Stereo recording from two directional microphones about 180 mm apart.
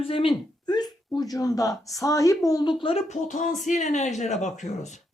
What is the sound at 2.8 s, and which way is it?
Speech, 35° left (ahead or behind).